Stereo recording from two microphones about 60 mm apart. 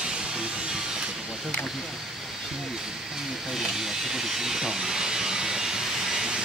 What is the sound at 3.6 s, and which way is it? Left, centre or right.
Vehicle, centre.